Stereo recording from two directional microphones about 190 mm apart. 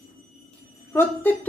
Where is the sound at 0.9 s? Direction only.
10° left (ahead or behind).